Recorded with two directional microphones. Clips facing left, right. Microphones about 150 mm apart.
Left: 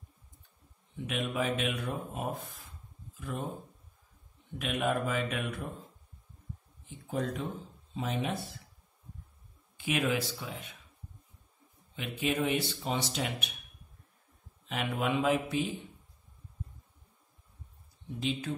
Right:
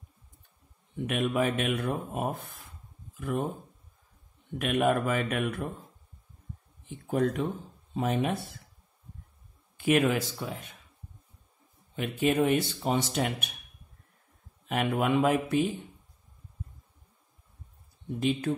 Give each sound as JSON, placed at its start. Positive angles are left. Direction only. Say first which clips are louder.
{"t": 0.9, "sound": "speech", "louder": "right 5 dB", "side_deg": -55}
{"t": 4.6, "sound": "a man's voice", "louder": "right 5 dB", "side_deg": -55}
{"t": 6.9, "sound": "a man's voice", "louder": "right 7 dB", "side_deg": -60}
{"t": 9.8, "sound": "speech", "louder": "right 6 dB", "side_deg": -50}
{"t": 11.9, "sound": "speech", "louder": "right 6 dB", "side_deg": -50}
{"t": 14.7, "sound": "speech", "louder": "right 5 dB", "side_deg": -50}
{"t": 18.2, "sound": "speech", "louder": "right 6 dB", "side_deg": -50}